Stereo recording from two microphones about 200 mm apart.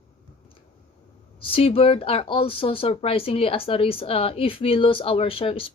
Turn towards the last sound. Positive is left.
turn(degrees=25)  # may be behind; listen again after turning